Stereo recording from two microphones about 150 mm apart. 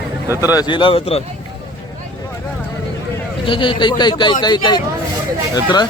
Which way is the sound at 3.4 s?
35° left (ahead or behind).